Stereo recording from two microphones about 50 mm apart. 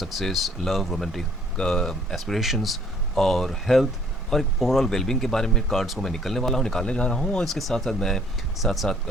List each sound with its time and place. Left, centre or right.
0.0 s speech: centre
1.5 s speech: centre
2.1 s speech: centre
7.4 s speech: centre
8.5 s speech: centre